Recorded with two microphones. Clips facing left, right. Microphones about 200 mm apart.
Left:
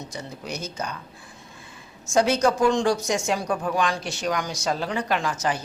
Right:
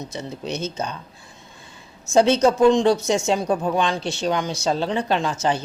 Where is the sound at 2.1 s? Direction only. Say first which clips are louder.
Right 4 dB; 25° right (ahead or behind).